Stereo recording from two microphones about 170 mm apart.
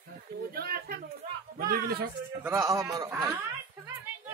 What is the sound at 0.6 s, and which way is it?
Speech, 65° right (ahead or behind).